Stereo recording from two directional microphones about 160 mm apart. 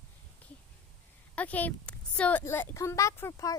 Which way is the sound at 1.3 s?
10° left (ahead or behind).